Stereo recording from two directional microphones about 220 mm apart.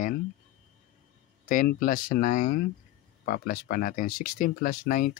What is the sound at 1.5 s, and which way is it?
Speech, 40° left (ahead or behind).